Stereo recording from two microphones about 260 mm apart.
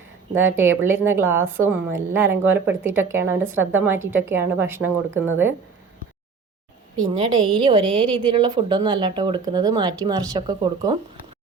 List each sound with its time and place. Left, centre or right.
0.3 s a woman's voice: centre
7.1 s a woman's voice: centre